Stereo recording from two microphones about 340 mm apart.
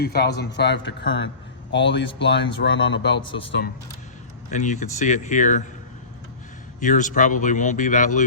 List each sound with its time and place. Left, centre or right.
0.0 s a man's voice: left
4.5 s a man's voice: left
6.7 s a man's voice: left